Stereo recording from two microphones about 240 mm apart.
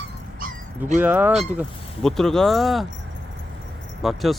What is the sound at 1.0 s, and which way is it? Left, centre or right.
Speech, centre.